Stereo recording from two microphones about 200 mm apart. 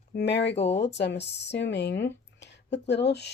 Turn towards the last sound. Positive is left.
turn(degrees=55)  # may be behind; listen again after turning